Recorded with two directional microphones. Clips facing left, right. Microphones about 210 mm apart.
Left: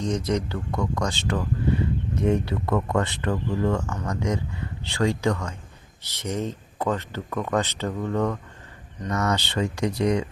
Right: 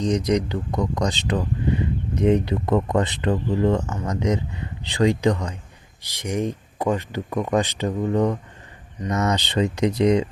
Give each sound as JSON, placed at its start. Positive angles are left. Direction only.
{"t": 0.0, "sound": "speech", "side_deg": -15}